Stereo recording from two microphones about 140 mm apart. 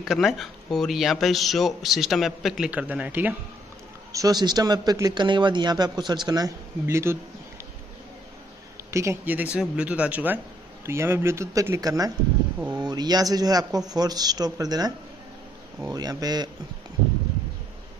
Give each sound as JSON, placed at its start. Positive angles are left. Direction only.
{"t": 0.1, "sound": "speech", "side_deg": 0}
{"t": 4.1, "sound": "speech", "side_deg": -25}
{"t": 8.9, "sound": "speech", "side_deg": -20}
{"t": 15.9, "sound": "speech", "side_deg": -25}